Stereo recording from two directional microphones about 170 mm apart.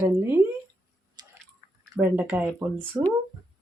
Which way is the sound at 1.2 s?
25° right (ahead or behind).